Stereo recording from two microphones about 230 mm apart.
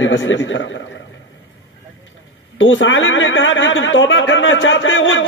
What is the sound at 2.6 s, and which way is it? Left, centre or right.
A man's voice, left.